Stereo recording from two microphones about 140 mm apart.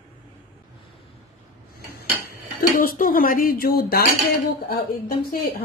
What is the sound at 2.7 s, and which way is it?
A woman's voice, 80° left.